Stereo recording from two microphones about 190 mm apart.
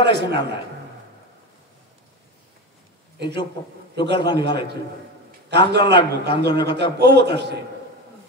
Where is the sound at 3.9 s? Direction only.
60° right (ahead or behind).